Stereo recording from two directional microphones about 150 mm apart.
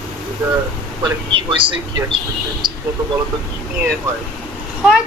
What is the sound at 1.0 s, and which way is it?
A man's voice, 35° right (ahead or behind).